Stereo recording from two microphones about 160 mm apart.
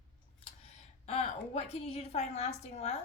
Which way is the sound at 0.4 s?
40° left (ahead or behind).